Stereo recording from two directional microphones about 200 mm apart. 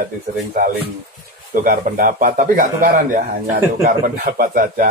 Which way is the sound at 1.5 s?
45° right (ahead or behind).